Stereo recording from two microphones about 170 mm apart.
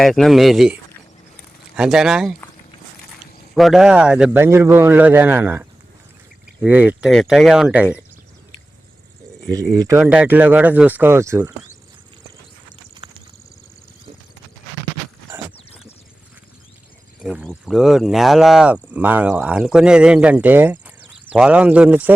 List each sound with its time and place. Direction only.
0.0 s speech: centre (ahead or behind)
3.5 s speech: centre (ahead or behind)
9.5 s speech: 20° right (ahead or behind)
17.2 s speech: 5° right (ahead or behind)